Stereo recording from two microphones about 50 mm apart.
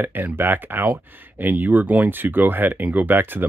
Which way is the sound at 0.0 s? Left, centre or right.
Right.